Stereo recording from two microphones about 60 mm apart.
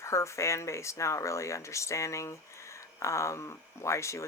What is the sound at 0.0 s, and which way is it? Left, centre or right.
Speech, left.